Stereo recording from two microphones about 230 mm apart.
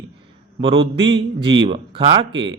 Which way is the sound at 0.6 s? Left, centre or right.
Right.